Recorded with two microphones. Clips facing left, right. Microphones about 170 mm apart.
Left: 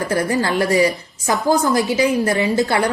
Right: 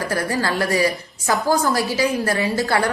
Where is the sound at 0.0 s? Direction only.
20° left (ahead or behind).